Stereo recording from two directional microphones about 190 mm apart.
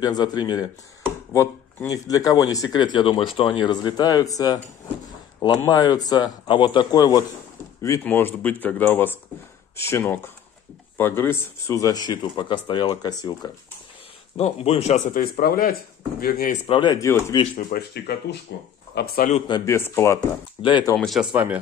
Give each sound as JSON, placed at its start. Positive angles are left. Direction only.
{"t": 0.0, "sound": "speech", "side_deg": 20}
{"t": 5.6, "sound": "speech", "side_deg": 20}
{"t": 14.3, "sound": "speech", "side_deg": 35}
{"t": 15.1, "sound": "speech", "side_deg": 50}
{"t": 16.6, "sound": "speech", "side_deg": 25}
{"t": 17.4, "sound": "speech", "side_deg": 45}
{"t": 19.3, "sound": "speech", "side_deg": 25}
{"t": 19.6, "sound": "speech", "side_deg": 15}
{"t": 20.6, "sound": "speech", "side_deg": 25}
{"t": 20.9, "sound": "speech", "side_deg": 0}